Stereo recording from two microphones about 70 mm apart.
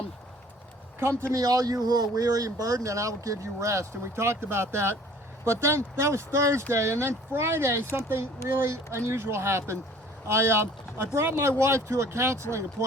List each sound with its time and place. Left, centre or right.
1.3 s speech: right